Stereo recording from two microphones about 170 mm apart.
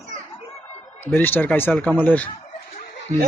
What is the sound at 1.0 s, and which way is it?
A man's voice, 10° left (ahead or behind).